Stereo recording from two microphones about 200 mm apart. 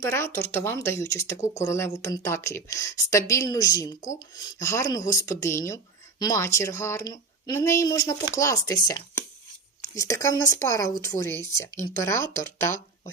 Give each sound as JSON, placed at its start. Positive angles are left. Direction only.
{"t": 0.1, "sound": "speech", "side_deg": 10}